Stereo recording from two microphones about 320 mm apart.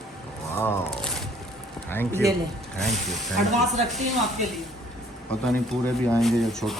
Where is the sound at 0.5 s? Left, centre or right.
Centre.